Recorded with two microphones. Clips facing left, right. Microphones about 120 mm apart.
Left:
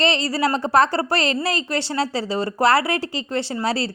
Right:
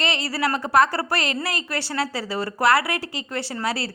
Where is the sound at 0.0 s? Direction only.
30° left (ahead or behind).